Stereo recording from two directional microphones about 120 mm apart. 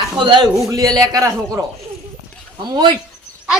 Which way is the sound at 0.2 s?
40° right (ahead or behind).